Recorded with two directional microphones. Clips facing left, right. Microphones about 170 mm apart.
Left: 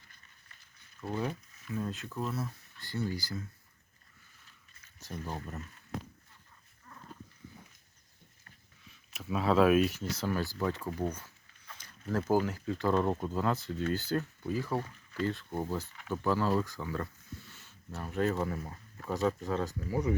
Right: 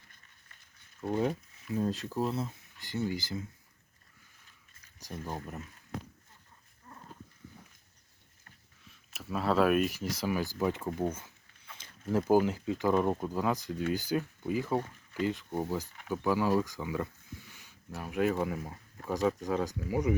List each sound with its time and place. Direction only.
1.0 s speech: 20° right (ahead or behind)
1.7 s speech: 35° right (ahead or behind)
4.9 s speech: 15° right (ahead or behind)
8.9 s speech: centre (ahead or behind)
10.0 s speech: 10° right (ahead or behind)
12.0 s speech: 10° right (ahead or behind)